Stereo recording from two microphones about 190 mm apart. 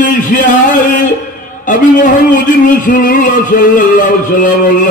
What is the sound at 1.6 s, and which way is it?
A man's voice, 45° left (ahead or behind).